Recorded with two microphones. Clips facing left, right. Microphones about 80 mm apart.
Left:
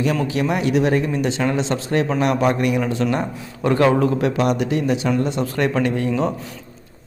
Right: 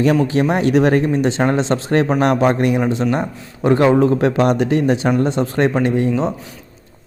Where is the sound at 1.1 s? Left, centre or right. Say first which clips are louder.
Right 4 dB; right.